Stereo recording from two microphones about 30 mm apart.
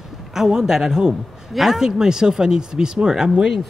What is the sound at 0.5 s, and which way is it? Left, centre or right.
Speech, centre.